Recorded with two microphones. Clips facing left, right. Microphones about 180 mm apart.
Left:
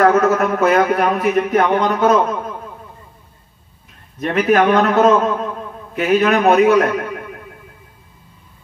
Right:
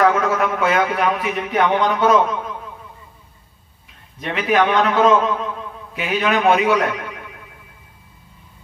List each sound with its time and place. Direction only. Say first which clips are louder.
0.0 s a man's voice: left 4 dB; 45° left (ahead or behind)
4.2 s a man's voice: left 4 dB; 45° left (ahead or behind)